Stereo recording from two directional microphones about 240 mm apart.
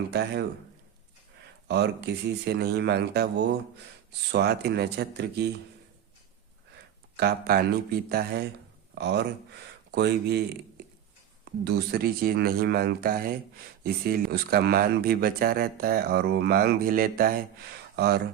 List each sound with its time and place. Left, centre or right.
0.1 s speech: right
1.6 s speech: right
4.3 s speech: right
7.2 s speech: right
11.6 s speech: right